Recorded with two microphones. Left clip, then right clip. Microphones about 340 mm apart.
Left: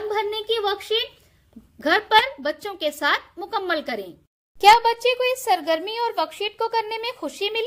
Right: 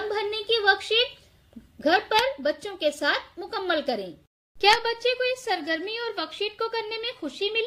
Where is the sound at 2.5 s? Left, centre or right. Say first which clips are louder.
Even; left.